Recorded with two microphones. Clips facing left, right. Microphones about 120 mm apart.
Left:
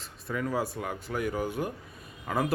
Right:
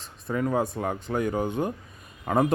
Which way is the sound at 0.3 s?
25° right (ahead or behind).